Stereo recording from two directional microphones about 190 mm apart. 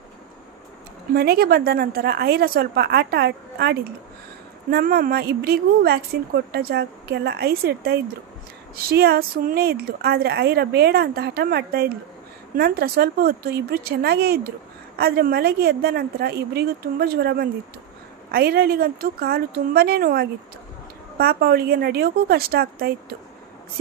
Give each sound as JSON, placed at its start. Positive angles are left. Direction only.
{"t": 1.1, "sound": "a woman's voice", "side_deg": -55}